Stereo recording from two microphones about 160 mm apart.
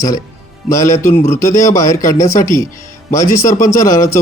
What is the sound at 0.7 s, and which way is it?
A man's voice, 20° left (ahead or behind).